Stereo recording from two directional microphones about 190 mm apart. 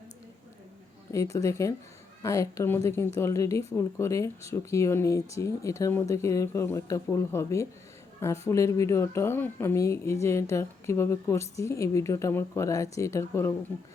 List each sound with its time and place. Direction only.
1.1 s speech: 15° left (ahead or behind)